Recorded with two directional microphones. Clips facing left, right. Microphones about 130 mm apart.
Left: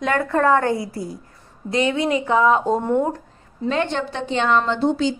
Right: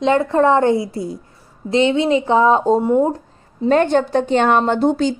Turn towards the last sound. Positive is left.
turn(degrees=-50)  # may be behind; listen again after turning